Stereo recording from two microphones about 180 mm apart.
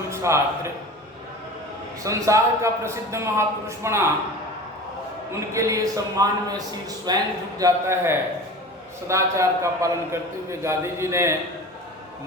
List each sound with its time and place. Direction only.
0.1 s a man's voice: 15° right (ahead or behind)
2.0 s a man's voice: 15° right (ahead or behind)
5.3 s a man's voice: 15° right (ahead or behind)